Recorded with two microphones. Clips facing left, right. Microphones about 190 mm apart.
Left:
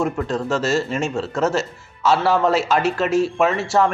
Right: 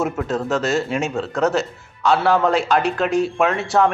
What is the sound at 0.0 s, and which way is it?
A man's voice, centre (ahead or behind).